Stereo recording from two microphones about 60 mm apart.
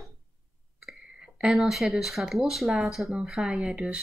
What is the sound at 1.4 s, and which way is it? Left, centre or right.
Speech, centre.